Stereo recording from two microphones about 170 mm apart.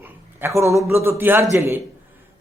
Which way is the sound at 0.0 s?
15° right (ahead or behind).